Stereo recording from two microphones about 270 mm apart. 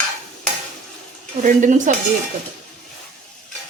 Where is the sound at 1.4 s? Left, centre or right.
Right.